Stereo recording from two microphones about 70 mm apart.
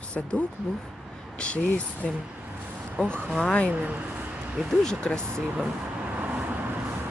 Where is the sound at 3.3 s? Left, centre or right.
Centre.